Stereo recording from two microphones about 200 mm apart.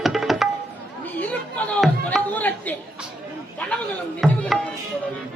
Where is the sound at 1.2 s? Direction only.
5° left (ahead or behind).